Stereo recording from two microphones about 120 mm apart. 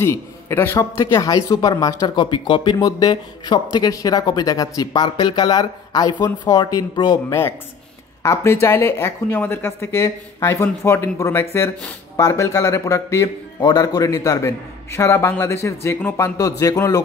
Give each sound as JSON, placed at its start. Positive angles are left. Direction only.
{"t": 0.0, "sound": "a man's voice", "side_deg": 20}
{"t": 7.2, "sound": "a man's voice", "side_deg": 20}